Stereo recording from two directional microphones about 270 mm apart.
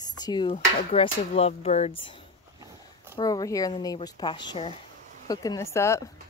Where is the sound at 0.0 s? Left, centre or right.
Centre.